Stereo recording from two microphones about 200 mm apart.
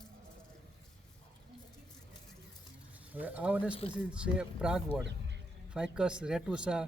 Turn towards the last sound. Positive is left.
turn(degrees=-5)  # may be behind; listen again after turning